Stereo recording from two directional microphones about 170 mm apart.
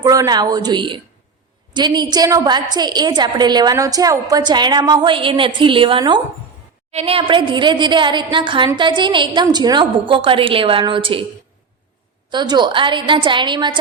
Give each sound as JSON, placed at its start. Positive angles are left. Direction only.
{"t": 0.0, "sound": "a woman's voice", "side_deg": -20}
{"t": 12.3, "sound": "a woman's voice", "side_deg": -25}